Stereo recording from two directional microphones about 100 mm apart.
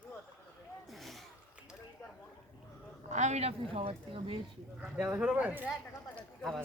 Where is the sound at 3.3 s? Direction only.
80° right.